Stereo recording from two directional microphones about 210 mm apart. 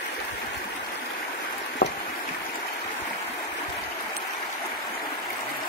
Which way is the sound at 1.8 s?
50° left (ahead or behind).